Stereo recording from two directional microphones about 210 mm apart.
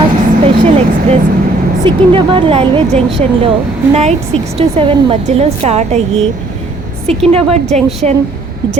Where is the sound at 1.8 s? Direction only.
25° right (ahead or behind).